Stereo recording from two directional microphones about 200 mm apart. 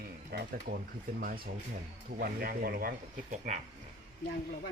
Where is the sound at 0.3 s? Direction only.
50° right (ahead or behind).